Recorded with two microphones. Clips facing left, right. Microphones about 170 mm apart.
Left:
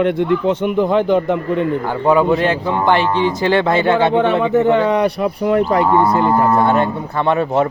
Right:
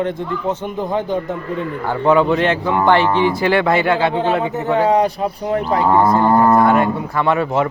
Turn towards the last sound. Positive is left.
turn(degrees=70)  # may be behind; listen again after turning